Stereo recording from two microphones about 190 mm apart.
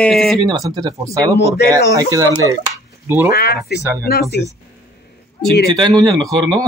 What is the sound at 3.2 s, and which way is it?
Speech, 55° left (ahead or behind).